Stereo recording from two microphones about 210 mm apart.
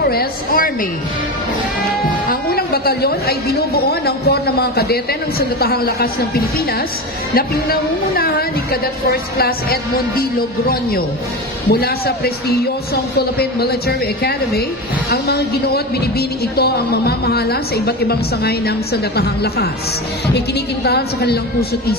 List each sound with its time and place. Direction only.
0.0 s a woman's voice: 45° left (ahead or behind)
2.2 s a woman's voice: 45° left (ahead or behind)
12.4 s a woman's voice: 50° left (ahead or behind)